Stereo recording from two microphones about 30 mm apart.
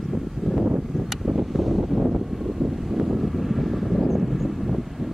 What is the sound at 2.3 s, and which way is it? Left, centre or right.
Vehicle, centre.